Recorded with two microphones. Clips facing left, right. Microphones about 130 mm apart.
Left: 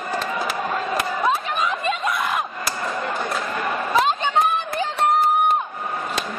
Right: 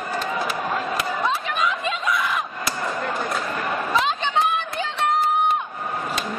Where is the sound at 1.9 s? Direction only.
50° left (ahead or behind).